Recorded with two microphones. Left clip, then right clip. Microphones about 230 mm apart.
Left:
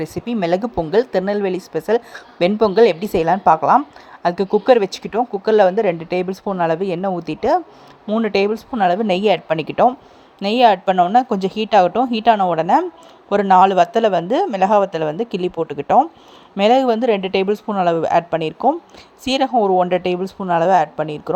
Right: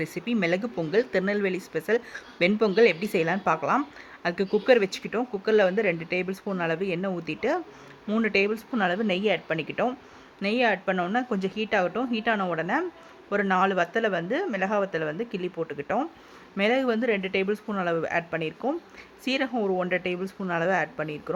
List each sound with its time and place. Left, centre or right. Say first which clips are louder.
0.0 s a woman's voice: left 6 dB; centre